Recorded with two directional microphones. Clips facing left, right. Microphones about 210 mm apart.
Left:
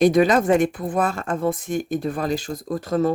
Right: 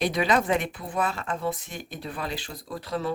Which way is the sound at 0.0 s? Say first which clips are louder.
Left 8 dB; 45° left (ahead or behind).